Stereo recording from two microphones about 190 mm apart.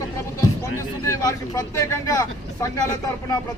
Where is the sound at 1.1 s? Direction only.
20° left (ahead or behind).